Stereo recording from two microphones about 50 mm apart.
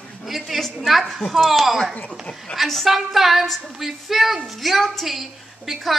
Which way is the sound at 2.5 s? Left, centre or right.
Centre.